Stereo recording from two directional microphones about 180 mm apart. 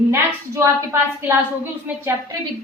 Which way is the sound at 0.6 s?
15° right (ahead or behind).